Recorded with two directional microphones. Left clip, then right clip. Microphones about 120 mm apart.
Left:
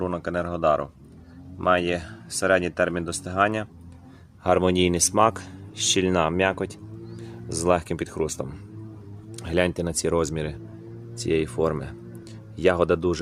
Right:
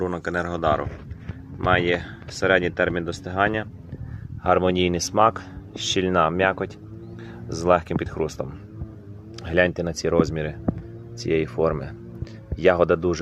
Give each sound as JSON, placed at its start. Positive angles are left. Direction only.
{"t": 0.0, "sound": "speech", "side_deg": 5}
{"t": 4.4, "sound": "speech", "side_deg": 35}